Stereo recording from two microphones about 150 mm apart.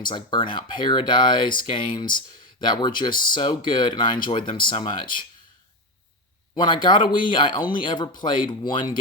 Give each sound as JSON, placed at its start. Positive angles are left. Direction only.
{"t": 0.0, "sound": "speech", "side_deg": 30}
{"t": 6.6, "sound": "speech", "side_deg": 30}